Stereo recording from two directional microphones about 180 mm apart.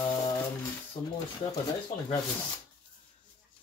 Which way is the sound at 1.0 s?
25° left (ahead or behind).